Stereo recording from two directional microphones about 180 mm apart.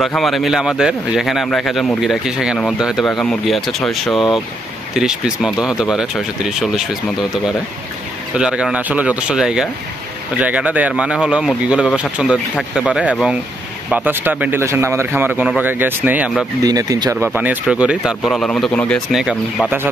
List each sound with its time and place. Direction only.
0.0 s a man's voice: centre (ahead or behind)
8.4 s a man's voice: 5° right (ahead or behind)
16.6 s a man's voice: 20° right (ahead or behind)